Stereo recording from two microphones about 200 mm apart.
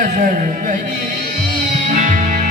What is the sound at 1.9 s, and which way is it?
Music, 40° right (ahead or behind).